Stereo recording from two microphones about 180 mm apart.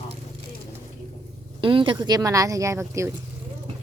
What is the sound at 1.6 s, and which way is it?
Speech, 30° right (ahead or behind).